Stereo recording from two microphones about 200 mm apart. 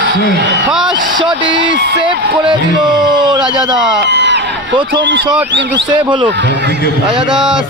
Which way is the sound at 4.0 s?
60° right (ahead or behind).